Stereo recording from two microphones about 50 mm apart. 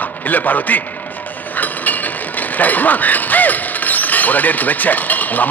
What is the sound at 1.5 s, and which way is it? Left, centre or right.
Vehicle, left.